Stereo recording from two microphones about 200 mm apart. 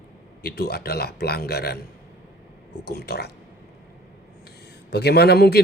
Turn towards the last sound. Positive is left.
turn(degrees=50)  # may be behind; listen again after turning